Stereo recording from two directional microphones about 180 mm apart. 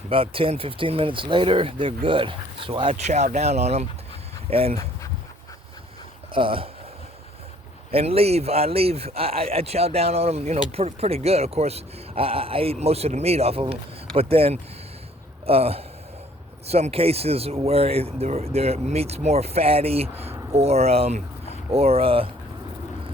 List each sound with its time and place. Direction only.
0.1 s speech: 30° right (ahead or behind)
2.9 s speech: 40° right (ahead or behind)
6.3 s speech: 30° right (ahead or behind)
7.9 s speech: 35° right (ahead or behind)